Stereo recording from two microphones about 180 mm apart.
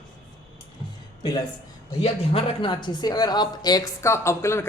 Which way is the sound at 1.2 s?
20° left (ahead or behind).